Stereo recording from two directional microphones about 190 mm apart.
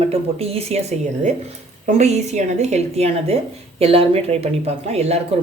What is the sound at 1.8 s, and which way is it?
A woman's voice, 35° right (ahead or behind).